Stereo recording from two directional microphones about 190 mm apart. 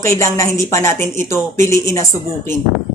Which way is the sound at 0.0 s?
15° left (ahead or behind).